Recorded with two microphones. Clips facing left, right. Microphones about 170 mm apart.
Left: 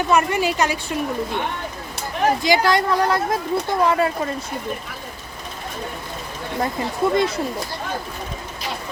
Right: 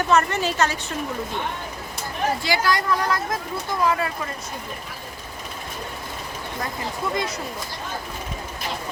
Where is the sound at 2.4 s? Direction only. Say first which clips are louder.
Left 5 dB; 20° left (ahead or behind).